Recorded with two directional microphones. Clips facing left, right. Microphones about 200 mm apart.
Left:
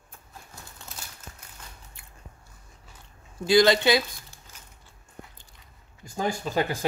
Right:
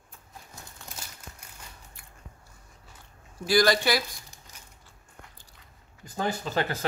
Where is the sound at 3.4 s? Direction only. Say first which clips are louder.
Left 4 dB; 20° left (ahead or behind).